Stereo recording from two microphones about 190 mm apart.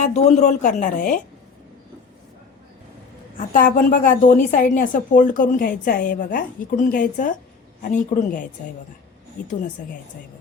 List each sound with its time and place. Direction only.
0.0 s speech: 35° left (ahead or behind)
3.3 s a woman's voice: 45° left (ahead or behind)